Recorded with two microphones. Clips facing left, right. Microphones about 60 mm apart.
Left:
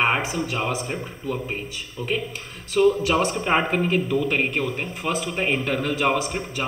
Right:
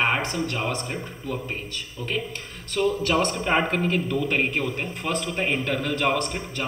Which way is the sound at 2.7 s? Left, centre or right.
Centre.